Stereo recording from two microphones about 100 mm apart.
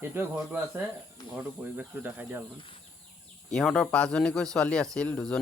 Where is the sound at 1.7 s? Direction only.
20° right (ahead or behind).